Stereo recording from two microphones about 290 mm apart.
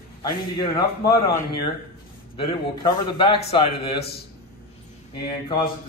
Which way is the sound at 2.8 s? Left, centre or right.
Centre.